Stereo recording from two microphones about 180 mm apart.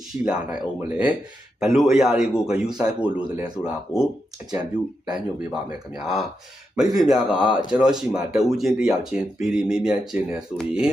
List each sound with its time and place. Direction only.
0.1 s speech: 5° right (ahead or behind)